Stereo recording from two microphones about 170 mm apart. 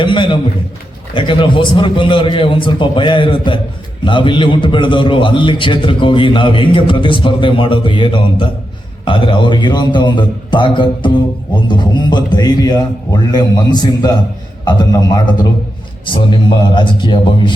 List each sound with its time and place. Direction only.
0.0 s a man's voice: 30° left (ahead or behind)